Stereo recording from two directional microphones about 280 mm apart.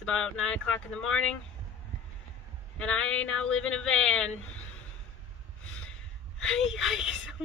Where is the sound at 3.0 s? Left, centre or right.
Left.